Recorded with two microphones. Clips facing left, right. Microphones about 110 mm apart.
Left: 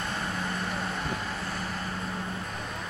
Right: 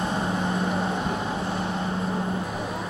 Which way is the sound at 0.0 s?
25° right (ahead or behind).